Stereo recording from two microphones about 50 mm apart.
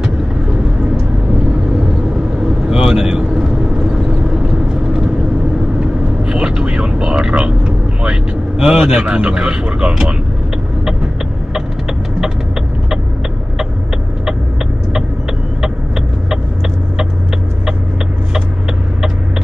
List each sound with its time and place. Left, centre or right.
2.7 s vehicle: centre
6.2 s vehicle: centre